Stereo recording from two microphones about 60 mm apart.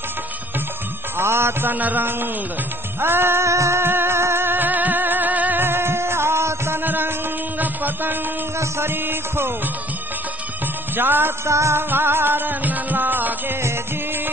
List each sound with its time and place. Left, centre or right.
1.1 s music: right
1.7 s music: right
3.8 s music: right
6.8 s a sound: right
8.5 s music: right
11.0 s music: right
11.4 s music: right
11.9 s music: right